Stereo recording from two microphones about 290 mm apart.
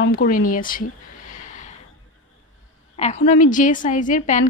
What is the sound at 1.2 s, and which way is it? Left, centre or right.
Snort, left.